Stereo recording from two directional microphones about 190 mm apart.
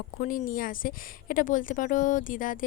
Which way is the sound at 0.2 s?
45° left (ahead or behind).